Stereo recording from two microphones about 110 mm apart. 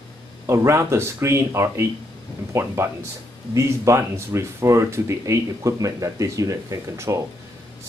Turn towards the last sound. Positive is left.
turn(degrees=-30)  # may be behind; listen again after turning